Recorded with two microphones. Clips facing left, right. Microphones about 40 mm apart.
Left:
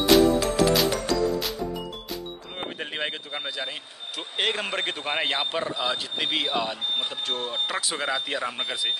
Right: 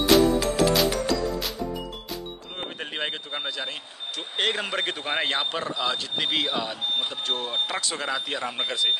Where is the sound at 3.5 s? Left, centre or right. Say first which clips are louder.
Even; centre.